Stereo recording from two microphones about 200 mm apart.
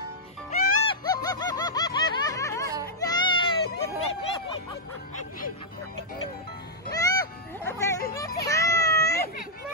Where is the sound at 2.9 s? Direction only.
20° left (ahead or behind).